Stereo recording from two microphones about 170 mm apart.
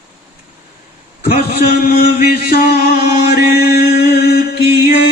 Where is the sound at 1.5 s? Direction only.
60° left (ahead or behind).